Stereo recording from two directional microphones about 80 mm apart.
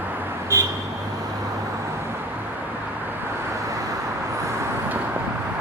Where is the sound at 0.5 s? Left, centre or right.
Right.